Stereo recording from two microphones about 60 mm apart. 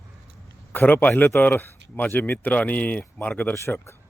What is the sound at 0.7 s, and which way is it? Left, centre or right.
Speech, left.